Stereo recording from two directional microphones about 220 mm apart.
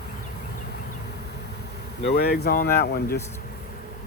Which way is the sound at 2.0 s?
50° left (ahead or behind).